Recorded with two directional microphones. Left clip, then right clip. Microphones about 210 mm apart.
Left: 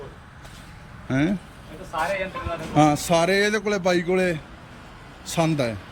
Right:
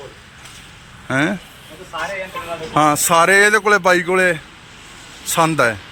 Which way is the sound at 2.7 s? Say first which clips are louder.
Right 6 dB; 5° left (ahead or behind).